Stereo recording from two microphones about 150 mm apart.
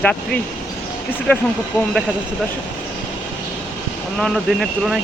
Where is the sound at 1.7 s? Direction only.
20° left (ahead or behind).